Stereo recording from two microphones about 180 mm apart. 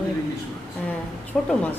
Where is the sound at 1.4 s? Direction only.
10° left (ahead or behind).